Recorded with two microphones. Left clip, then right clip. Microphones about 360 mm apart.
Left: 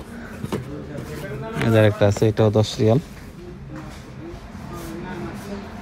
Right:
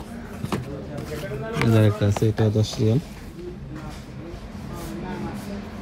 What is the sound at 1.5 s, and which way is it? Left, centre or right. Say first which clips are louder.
A man's voice: left 4 dB; centre.